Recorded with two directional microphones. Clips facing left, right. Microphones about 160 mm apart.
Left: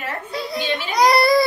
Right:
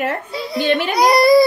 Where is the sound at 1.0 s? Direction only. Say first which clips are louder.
Right 3 dB; 15° right (ahead or behind).